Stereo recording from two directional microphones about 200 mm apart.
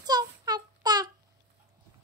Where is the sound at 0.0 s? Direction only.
20° right (ahead or behind).